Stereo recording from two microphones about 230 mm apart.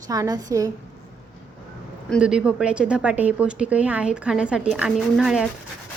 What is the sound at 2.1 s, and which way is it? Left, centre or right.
A woman's voice, centre.